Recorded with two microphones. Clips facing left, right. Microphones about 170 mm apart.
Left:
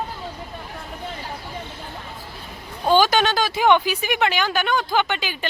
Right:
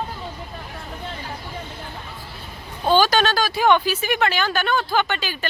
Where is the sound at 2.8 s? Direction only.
15° left (ahead or behind).